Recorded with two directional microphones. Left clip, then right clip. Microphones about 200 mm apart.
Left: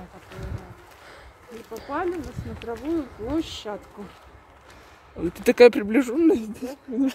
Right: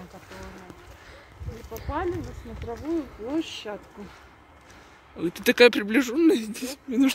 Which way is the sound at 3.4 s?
50° left (ahead or behind).